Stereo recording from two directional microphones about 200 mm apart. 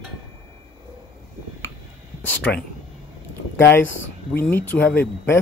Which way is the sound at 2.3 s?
5° left (ahead or behind).